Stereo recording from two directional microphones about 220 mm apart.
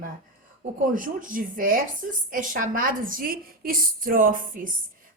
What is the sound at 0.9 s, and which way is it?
A woman's voice, 40° right (ahead or behind).